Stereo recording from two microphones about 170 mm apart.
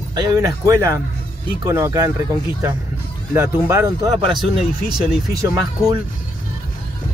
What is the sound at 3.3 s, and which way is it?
Speech, 15° right (ahead or behind).